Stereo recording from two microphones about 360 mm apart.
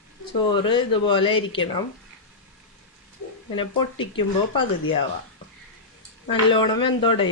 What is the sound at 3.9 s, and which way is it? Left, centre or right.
Speech, left.